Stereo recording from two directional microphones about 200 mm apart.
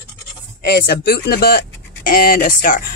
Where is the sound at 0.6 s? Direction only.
55° left (ahead or behind).